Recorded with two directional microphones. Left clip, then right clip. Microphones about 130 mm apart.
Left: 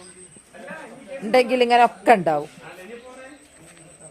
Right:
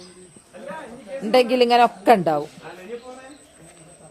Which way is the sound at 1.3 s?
20° right (ahead or behind).